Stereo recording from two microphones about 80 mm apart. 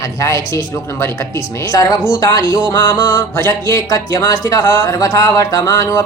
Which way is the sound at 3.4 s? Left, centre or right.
Left.